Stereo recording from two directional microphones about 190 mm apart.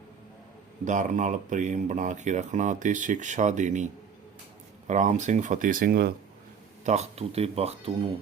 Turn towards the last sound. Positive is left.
turn(degrees=-30)  # may be behind; listen again after turning